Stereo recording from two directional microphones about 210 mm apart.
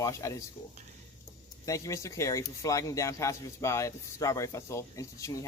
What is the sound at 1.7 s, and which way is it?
Speech, 15° left (ahead or behind).